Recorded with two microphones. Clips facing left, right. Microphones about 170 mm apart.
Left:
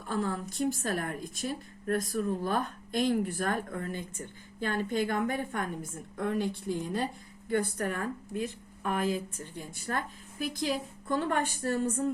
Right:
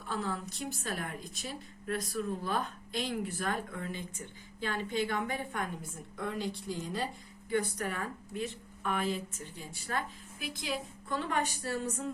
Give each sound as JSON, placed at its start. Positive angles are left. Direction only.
{"t": 0.1, "sound": "a woman's voice", "side_deg": 50}
{"t": 10.4, "sound": "a woman's voice", "side_deg": 45}